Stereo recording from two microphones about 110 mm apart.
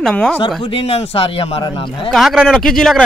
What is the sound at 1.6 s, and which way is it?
Speech, 50° left (ahead or behind).